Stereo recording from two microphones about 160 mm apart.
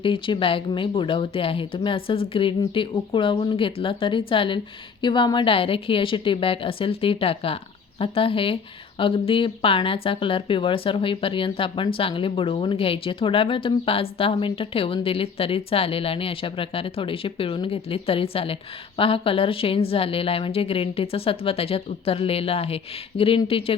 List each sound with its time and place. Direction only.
0.0 s speech: 30° left (ahead or behind)